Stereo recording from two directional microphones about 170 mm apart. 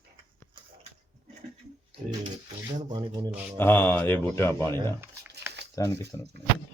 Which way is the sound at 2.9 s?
25° right (ahead or behind).